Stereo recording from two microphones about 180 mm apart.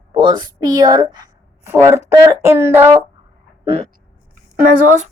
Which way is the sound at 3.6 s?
30° right (ahead or behind).